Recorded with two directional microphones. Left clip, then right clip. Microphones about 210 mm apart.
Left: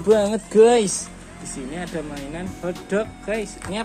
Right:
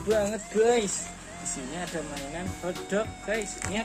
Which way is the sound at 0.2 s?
25° left (ahead or behind).